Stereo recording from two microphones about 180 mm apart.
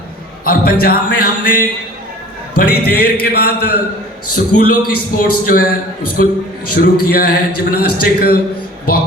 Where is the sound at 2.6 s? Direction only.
55° left (ahead or behind).